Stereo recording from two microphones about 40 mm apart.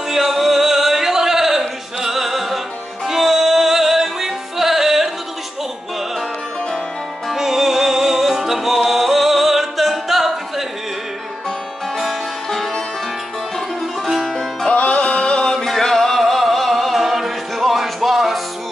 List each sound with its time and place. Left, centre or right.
0.1 s music: centre
7.2 s music: centre
14.0 s music: centre
14.7 s music: left
15.0 s music: left
15.5 s music: centre